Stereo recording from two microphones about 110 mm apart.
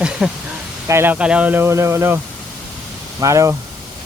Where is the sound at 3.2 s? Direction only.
30° right (ahead or behind).